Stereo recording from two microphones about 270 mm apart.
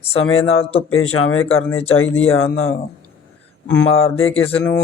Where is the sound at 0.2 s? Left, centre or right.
Left.